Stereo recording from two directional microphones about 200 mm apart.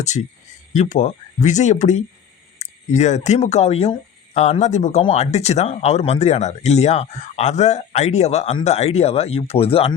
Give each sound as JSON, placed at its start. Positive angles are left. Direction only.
{"t": 0.0, "sound": "speech", "side_deg": 35}